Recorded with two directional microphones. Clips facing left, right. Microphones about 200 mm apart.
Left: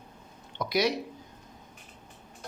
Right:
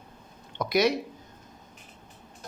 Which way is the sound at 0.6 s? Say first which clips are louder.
Right 3 dB; 50° right (ahead or behind).